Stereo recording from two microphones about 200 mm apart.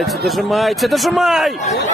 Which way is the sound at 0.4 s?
Centre (ahead or behind).